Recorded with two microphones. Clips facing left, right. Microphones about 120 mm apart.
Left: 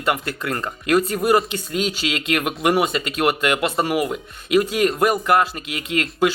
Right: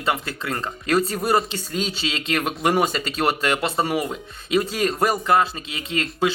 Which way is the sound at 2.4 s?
5° left (ahead or behind).